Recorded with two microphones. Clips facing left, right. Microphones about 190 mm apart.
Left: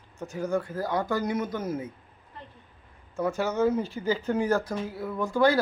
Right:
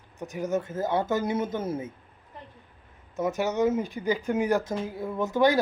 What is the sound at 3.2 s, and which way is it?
Speech, 15° right (ahead or behind).